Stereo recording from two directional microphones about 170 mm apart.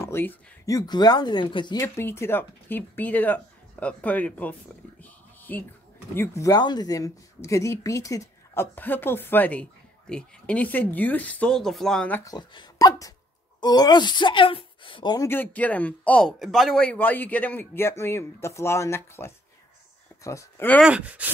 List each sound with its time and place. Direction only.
0.0 s speech: 15° left (ahead or behind)
5.0 s a sound: 10° left (ahead or behind)
6.1 s speech: 15° left (ahead or behind)
12.3 s a woman's voice: 20° left (ahead or behind)
15.2 s speech: 10° left (ahead or behind)
20.8 s speech: 5° right (ahead or behind)